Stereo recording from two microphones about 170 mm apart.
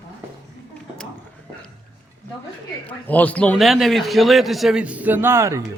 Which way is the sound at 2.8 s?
10° left (ahead or behind).